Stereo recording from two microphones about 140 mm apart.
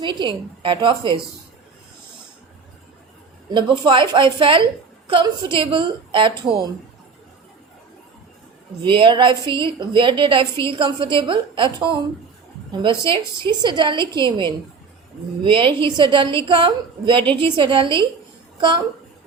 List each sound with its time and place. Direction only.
0.0 s a woman's voice: 35° right (ahead or behind)
3.5 s a woman's voice: 35° right (ahead or behind)
8.8 s a woman's voice: 35° right (ahead or behind)
18.5 s a sound: 35° right (ahead or behind)